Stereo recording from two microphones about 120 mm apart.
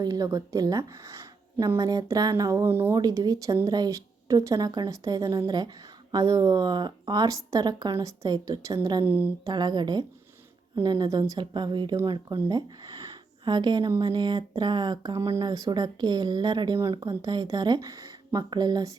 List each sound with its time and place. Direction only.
0.0 s speech: 35° right (ahead or behind)
2.9 s speech: 30° right (ahead or behind)